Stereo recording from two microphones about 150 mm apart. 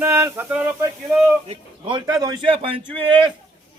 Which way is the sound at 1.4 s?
30° right (ahead or behind).